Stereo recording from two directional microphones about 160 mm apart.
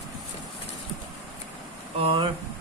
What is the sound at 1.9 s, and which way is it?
Speech, 35° right (ahead or behind).